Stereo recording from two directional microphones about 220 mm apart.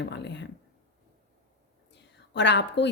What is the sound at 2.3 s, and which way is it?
Speech, 50° left (ahead or behind).